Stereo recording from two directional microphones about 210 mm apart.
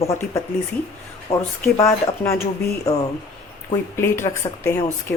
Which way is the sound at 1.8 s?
10° left (ahead or behind).